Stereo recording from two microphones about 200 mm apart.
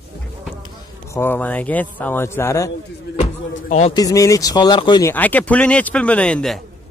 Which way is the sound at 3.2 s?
35° left (ahead or behind).